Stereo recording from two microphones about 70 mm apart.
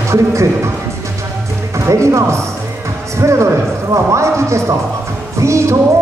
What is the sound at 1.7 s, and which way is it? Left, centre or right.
Speech, right.